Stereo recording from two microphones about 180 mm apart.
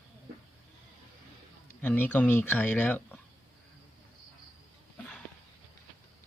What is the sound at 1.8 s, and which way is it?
Speech, 10° left (ahead or behind).